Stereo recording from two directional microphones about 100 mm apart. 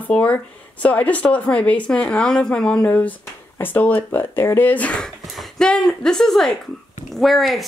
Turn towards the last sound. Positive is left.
turn(degrees=0)  # may be behind; listen again after turning